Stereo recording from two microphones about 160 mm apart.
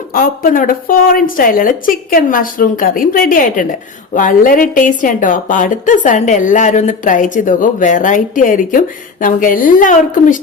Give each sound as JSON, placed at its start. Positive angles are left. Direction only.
{"t": 0.1, "sound": "a woman's voice", "side_deg": 60}